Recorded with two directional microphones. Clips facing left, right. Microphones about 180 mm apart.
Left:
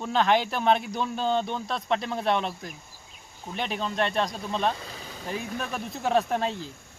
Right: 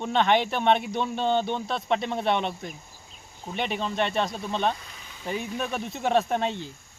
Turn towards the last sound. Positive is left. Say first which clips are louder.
# right 1 dB
turn(degrees=0)  # may be behind; listen again after turning